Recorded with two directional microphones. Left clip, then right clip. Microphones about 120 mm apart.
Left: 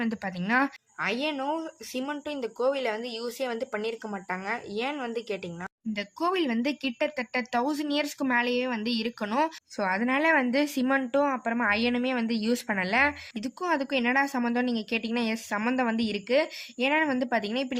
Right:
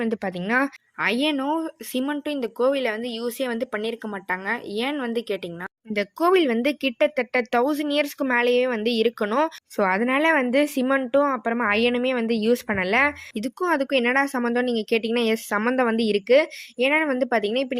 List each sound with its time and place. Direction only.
0.0 s speech: 35° right (ahead or behind)
5.9 s speech: 45° right (ahead or behind); by 13.1 s 30° right (ahead or behind)
13.3 s speech: 40° right (ahead or behind)